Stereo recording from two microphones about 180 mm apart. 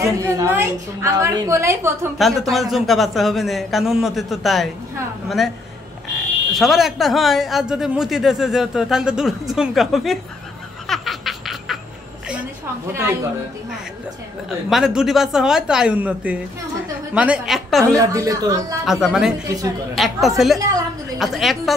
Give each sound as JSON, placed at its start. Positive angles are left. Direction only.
{"t": 0.0, "sound": "a woman's voice", "side_deg": -15}
{"t": 2.1, "sound": "a man's voice", "side_deg": 0}
{"t": 6.5, "sound": "a man's voice", "side_deg": 0}
{"t": 10.9, "sound": "laughter", "side_deg": 0}
{"t": 14.7, "sound": "a man's voice", "side_deg": -5}
{"t": 17.9, "sound": "a woman's voice", "side_deg": -20}
{"t": 18.9, "sound": "a man's voice", "side_deg": -5}
{"t": 19.4, "sound": "a man's voice", "side_deg": -20}
{"t": 20.0, "sound": "a man's voice", "side_deg": 0}